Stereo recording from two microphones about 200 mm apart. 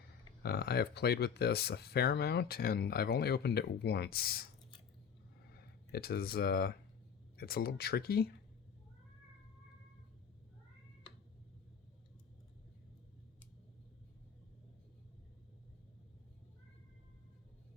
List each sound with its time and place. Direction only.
0.4 s speech: 55° left (ahead or behind)
5.9 s speech: 50° left (ahead or behind)